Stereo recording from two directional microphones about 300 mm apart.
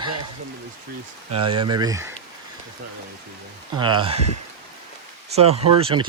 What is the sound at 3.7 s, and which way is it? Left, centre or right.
Speech, centre.